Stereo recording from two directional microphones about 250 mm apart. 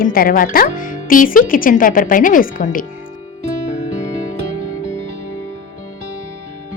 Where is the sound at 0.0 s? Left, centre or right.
Left.